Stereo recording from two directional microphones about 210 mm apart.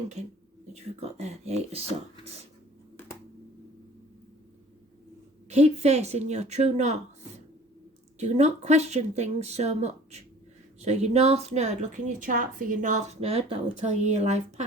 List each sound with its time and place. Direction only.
0.7 s a woman's voice: 30° right (ahead or behind)
5.5 s a woman's voice: 30° right (ahead or behind)
8.2 s a woman's voice: 35° right (ahead or behind)